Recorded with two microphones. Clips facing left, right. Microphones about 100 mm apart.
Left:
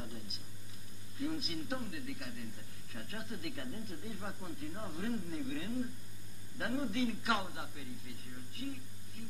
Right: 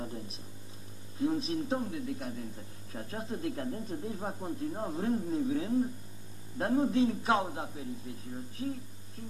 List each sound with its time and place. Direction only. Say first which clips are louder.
0.0 s speech: right 7 dB; 30° right (ahead or behind)